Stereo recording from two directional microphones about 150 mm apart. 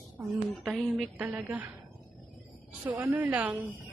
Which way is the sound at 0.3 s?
Centre (ahead or behind).